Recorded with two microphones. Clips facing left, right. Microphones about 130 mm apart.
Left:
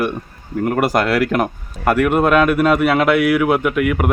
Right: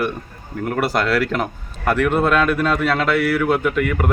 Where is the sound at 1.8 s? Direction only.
10° left (ahead or behind).